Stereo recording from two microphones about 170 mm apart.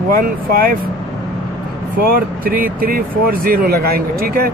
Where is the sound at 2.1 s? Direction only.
55° right (ahead or behind).